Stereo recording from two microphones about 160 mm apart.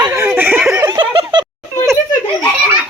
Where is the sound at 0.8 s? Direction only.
30° right (ahead or behind).